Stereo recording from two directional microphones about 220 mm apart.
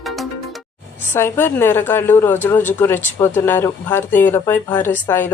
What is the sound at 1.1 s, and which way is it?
A woman's voice, 10° left (ahead or behind).